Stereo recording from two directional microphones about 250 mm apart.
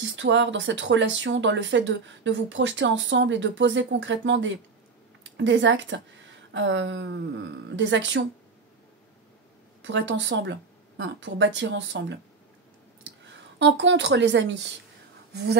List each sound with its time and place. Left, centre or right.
0.0 s speech: right
9.8 s speech: right
13.3 s speech: right